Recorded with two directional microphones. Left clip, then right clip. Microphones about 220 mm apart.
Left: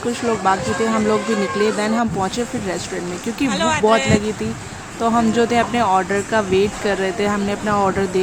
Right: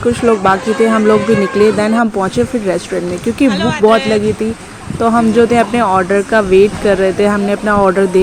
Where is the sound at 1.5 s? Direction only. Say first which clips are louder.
Right 7 dB; 20° right (ahead or behind).